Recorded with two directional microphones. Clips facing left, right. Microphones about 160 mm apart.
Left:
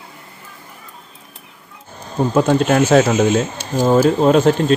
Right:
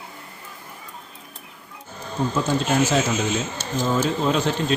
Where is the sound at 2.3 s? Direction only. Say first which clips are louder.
Left 8 dB; 60° left (ahead or behind).